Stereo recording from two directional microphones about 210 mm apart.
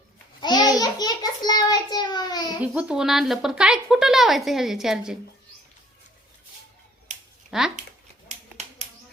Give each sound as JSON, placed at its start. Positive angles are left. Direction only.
{"t": 0.4, "sound": "a child's voice", "side_deg": 20}
{"t": 2.6, "sound": "a woman's voice", "side_deg": -5}
{"t": 7.5, "sound": "speech", "side_deg": 0}